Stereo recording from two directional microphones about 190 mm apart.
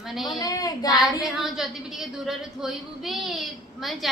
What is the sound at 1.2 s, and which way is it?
A woman's voice, centre (ahead or behind).